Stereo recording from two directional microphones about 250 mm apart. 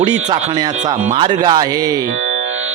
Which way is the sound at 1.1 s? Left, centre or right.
Centre.